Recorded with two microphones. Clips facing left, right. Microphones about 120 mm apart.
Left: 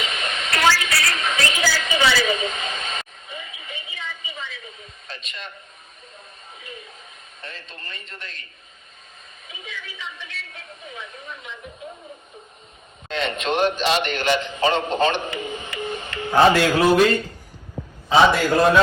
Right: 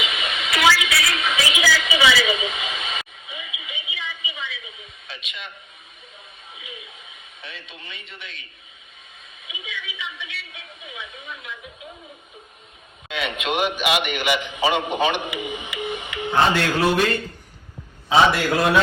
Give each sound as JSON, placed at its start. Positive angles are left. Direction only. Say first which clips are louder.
{"t": 0.0, "sound": "a sound", "louder": "even", "side_deg": -5}
{"t": 6.6, "sound": "a sound", "louder": "left 2 dB", "side_deg": -5}
{"t": 7.4, "sound": "a woman's voice", "louder": "left 1 dB", "side_deg": 0}
{"t": 9.5, "sound": "a woman's voice", "louder": "right 2 dB", "side_deg": 0}
{"t": 13.1, "sound": "a man's voice", "louder": "left 2 dB", "side_deg": -5}
{"t": 18.1, "sound": "a woman's voice", "louder": "left 1 dB", "side_deg": 0}